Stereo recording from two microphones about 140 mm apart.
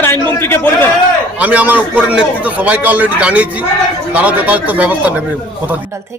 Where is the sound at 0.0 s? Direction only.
15° left (ahead or behind).